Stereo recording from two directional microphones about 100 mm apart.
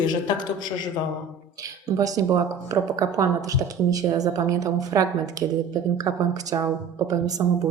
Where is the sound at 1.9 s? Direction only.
35° right (ahead or behind).